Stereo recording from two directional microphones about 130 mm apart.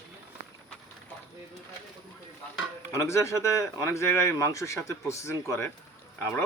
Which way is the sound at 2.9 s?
20° left (ahead or behind).